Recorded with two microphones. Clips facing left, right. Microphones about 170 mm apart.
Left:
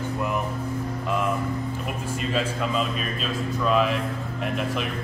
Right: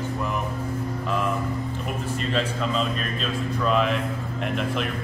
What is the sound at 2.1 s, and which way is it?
A man's voice, 5° left (ahead or behind).